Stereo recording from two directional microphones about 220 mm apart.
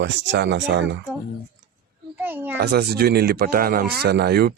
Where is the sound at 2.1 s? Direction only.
10° right (ahead or behind).